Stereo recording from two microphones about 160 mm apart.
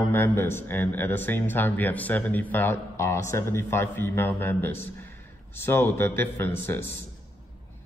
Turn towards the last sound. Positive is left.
turn(degrees=10)  # may be behind; listen again after turning